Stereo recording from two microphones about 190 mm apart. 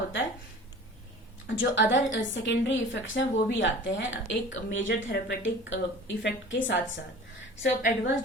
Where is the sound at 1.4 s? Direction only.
75° left (ahead or behind).